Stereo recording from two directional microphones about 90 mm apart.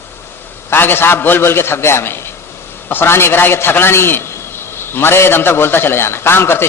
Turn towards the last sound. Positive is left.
turn(degrees=25)  # may be behind; listen again after turning